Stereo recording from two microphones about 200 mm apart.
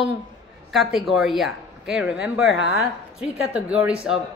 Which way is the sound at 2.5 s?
65° left (ahead or behind).